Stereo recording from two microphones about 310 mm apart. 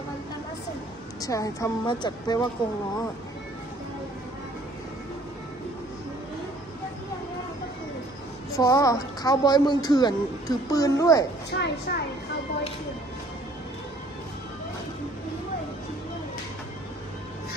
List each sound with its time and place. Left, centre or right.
1.2 s speech: centre
8.5 s speech: centre
11.5 s a woman's voice: left